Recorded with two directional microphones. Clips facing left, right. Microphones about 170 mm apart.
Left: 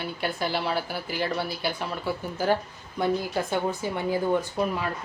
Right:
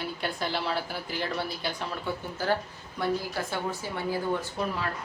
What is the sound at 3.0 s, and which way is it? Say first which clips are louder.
A woman's voice: left 4 dB; 20° left (ahead or behind).